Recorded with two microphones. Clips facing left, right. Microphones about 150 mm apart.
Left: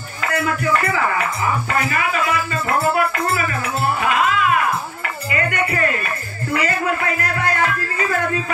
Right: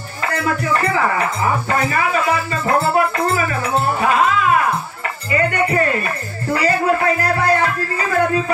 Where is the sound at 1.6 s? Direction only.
30° right (ahead or behind).